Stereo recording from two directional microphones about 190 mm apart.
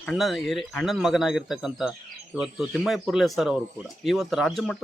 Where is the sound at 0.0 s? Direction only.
Centre (ahead or behind).